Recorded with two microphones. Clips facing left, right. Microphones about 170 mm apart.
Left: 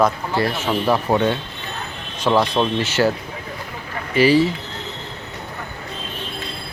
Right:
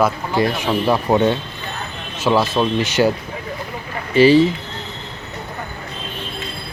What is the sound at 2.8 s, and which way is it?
Speech, 15° right (ahead or behind).